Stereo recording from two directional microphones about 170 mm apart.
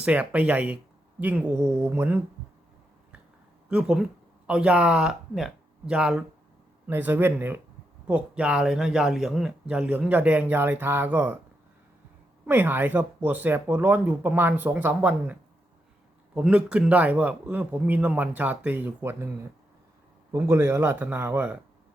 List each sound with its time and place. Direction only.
0.0 s speech: 5° right (ahead or behind)
3.7 s speech: 5° right (ahead or behind)
12.5 s speech: 10° right (ahead or behind)
20.3 s speech: 15° right (ahead or behind)